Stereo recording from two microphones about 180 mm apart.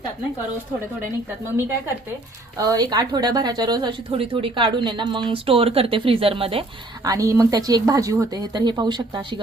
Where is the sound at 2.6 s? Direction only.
20° right (ahead or behind).